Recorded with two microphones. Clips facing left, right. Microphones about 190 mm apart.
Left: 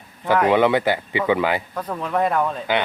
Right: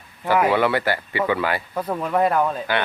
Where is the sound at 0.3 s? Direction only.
10° right (ahead or behind).